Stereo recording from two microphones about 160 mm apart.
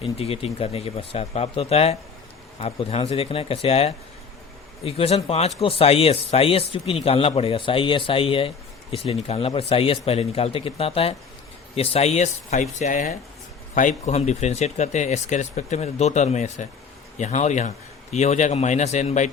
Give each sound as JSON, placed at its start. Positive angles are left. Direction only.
{"t": 0.0, "sound": "speech", "side_deg": 40}